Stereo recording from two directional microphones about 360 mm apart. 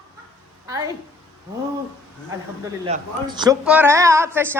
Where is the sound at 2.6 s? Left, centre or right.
Centre.